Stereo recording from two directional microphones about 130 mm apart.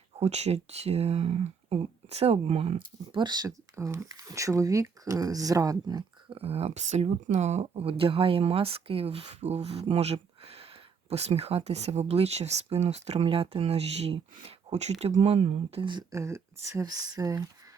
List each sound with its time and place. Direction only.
0.2 s speech: 55° right (ahead or behind); by 3.5 s 35° right (ahead or behind)
3.8 s speech: 20° right (ahead or behind)
6.3 s speech: 50° right (ahead or behind)
7.7 s speech: 45° right (ahead or behind)
16.1 s speech: 25° right (ahead or behind)